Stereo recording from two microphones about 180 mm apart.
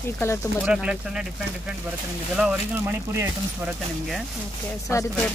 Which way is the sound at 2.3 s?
5° right (ahead or behind).